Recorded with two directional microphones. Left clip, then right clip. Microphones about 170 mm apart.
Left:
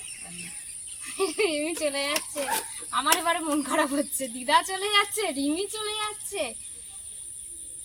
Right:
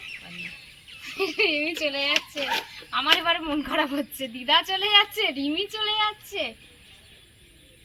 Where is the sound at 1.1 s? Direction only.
10° left (ahead or behind).